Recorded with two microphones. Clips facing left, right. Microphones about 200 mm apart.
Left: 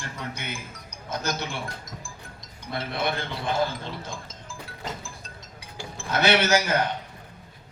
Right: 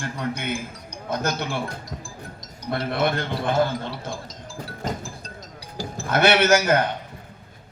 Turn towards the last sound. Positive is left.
turn(degrees=-55)  # may be behind; listen again after turning